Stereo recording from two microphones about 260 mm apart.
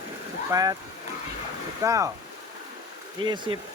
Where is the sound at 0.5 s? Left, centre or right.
Centre.